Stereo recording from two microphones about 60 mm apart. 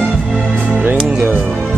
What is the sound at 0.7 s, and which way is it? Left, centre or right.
Music, right.